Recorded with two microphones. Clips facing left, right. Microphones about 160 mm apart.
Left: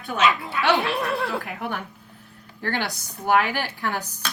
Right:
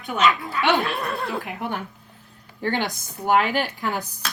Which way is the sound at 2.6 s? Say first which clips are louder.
Right 3 dB; 20° right (ahead or behind).